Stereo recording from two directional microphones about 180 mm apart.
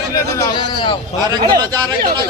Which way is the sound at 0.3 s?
25° left (ahead or behind).